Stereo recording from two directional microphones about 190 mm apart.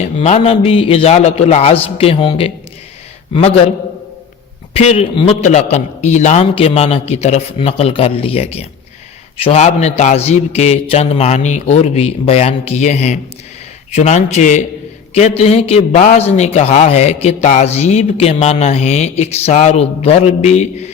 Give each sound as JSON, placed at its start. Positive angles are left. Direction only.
{"t": 0.2, "sound": "a man's voice", "side_deg": 30}
{"t": 4.7, "sound": "a man's voice", "side_deg": 35}